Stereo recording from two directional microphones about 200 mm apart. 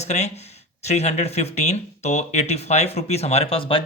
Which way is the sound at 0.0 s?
35° left (ahead or behind).